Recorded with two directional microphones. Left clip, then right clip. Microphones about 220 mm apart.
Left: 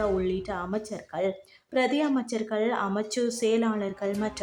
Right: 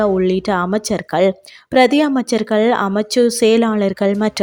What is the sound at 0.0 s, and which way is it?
A woman's voice, 40° right (ahead or behind).